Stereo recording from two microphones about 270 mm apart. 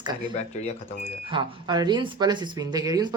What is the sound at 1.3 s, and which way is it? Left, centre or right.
Speech, centre.